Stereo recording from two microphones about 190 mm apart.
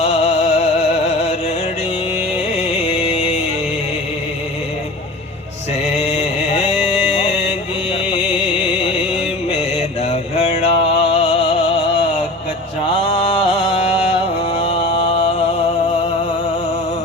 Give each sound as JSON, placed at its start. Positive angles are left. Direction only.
{"t": 0.0, "sound": "music", "side_deg": 30}
{"t": 2.6, "sound": "music", "side_deg": 30}
{"t": 6.0, "sound": "music", "side_deg": 30}
{"t": 9.5, "sound": "music", "side_deg": 35}
{"t": 14.5, "sound": "a sound", "side_deg": 30}